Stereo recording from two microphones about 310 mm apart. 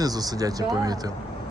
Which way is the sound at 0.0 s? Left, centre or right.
Centre.